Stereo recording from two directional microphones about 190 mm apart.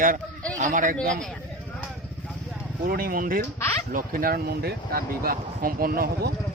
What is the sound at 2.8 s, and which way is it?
Speech, 50° right (ahead or behind).